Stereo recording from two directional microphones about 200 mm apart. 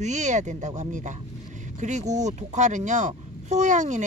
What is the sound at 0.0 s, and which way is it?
Speech, 35° right (ahead or behind).